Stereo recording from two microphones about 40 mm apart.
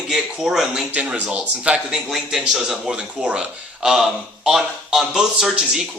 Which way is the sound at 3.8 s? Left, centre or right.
Centre.